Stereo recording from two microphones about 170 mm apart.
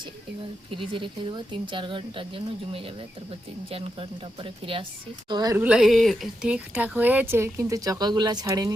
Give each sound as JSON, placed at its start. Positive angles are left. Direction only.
{"t": 0.7, "sound": "speech", "side_deg": -30}
{"t": 5.5, "sound": "speech", "side_deg": -5}